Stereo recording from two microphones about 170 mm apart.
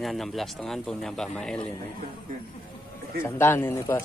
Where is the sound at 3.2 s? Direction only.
15° left (ahead or behind).